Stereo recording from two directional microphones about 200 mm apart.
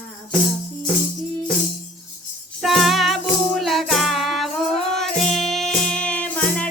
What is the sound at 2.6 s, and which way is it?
Music, centre (ahead or behind).